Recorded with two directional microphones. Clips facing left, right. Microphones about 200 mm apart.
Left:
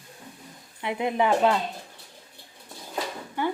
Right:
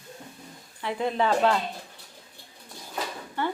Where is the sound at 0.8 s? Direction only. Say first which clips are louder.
Left 1 dB; 15° left (ahead or behind).